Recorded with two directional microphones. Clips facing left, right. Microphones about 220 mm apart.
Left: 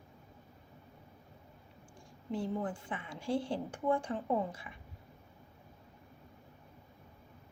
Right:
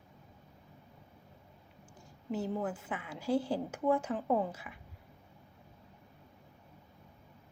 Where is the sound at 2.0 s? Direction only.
30° left (ahead or behind).